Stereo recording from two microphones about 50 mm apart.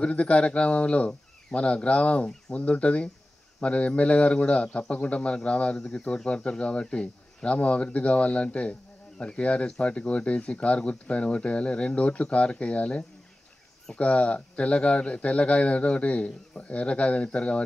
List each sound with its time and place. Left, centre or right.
0.0 s a man's voice: left